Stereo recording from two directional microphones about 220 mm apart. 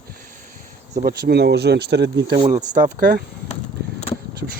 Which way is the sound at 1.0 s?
45° right (ahead or behind).